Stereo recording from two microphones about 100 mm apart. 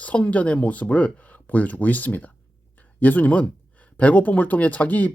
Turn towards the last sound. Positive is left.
turn(degrees=15)  # may be behind; listen again after turning